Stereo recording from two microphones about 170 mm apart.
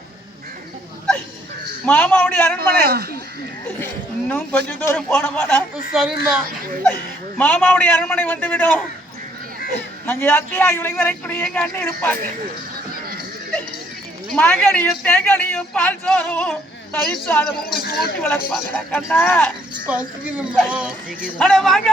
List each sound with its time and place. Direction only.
1.8 s speech: 10° left (ahead or behind)
2.6 s a man's voice: 70° right (ahead or behind)
4.3 s speech: 10° left (ahead or behind)
5.9 s speech: 5° right (ahead or behind)
7.3 s speech: 10° left (ahead or behind)
10.1 s speech: 10° left (ahead or behind)
14.3 s speech: 5° left (ahead or behind)
17.7 s speech: 60° left (ahead or behind)
18.2 s speech: 10° left (ahead or behind)
19.9 s speech: 5° right (ahead or behind)
21.3 s speech: 5° left (ahead or behind)